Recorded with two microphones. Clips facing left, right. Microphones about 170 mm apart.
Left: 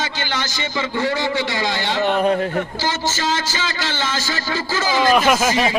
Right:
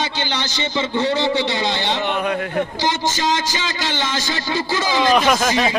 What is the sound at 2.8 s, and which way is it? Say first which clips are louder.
A man's voice: right 2 dB; 15° right (ahead or behind).